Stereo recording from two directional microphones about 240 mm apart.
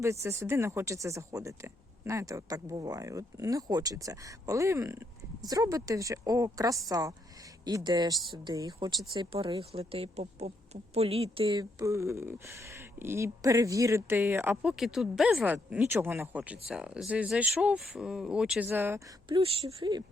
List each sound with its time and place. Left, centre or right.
0.0 s speech: centre